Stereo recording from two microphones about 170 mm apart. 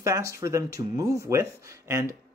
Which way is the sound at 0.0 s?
20° right (ahead or behind).